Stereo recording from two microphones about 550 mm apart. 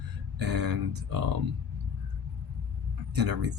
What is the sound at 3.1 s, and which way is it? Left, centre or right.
Speech, right.